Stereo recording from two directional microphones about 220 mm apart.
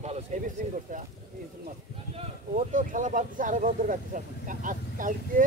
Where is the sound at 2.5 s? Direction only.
35° right (ahead or behind).